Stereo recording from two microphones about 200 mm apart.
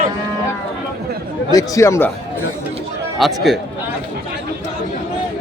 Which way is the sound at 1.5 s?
15° left (ahead or behind).